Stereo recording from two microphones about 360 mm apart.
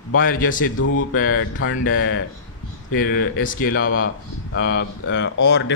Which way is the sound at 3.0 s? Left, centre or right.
Left.